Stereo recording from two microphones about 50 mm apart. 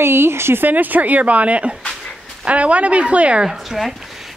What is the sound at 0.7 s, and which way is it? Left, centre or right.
Speech, right.